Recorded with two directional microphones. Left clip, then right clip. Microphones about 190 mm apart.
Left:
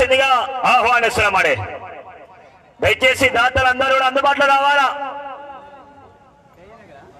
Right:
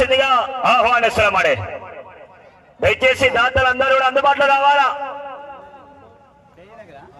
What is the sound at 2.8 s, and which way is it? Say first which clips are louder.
A man's voice: even; 55° left (ahead or behind).